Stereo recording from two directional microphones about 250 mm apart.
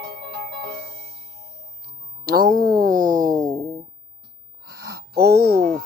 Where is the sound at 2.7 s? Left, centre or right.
Right.